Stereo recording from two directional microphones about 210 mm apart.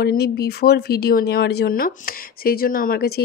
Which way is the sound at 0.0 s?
50° left (ahead or behind).